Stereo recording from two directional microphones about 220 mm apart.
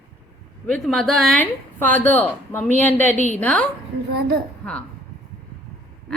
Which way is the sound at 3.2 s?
30° left (ahead or behind).